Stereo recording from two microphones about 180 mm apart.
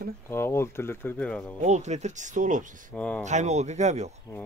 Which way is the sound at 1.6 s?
40° right (ahead or behind).